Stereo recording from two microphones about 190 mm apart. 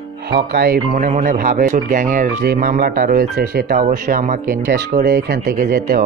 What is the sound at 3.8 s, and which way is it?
Speech, 40° right (ahead or behind).